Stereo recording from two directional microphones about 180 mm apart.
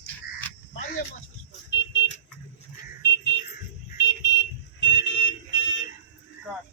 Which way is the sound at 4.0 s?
85° left.